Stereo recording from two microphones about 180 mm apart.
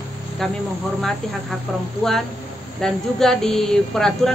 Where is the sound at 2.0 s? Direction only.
5° left (ahead or behind).